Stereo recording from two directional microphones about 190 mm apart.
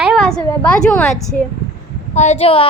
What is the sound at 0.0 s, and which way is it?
A woman's voice, centre (ahead or behind).